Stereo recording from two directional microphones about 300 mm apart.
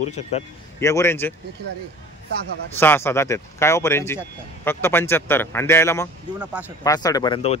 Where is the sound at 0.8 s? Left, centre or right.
Centre.